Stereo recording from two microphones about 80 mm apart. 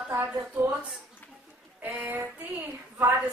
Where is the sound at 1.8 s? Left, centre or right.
Right.